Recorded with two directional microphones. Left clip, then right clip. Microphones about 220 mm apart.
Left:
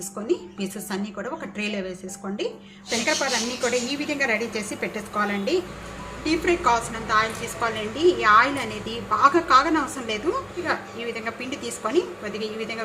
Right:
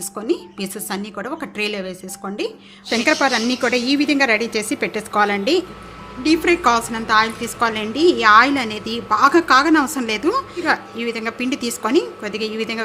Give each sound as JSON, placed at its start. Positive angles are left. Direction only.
{"t": 0.3, "sound": "a woman's voice", "side_deg": -50}